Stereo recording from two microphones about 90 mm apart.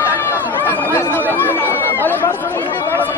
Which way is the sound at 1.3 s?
25° left (ahead or behind).